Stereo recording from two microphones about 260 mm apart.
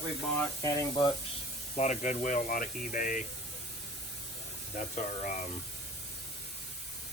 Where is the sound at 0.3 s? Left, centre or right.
Centre.